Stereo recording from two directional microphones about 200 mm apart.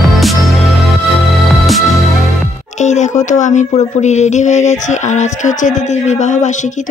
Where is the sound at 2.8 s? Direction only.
35° left (ahead or behind).